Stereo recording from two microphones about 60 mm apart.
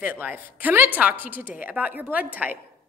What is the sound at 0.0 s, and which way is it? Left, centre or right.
A woman's voice, right.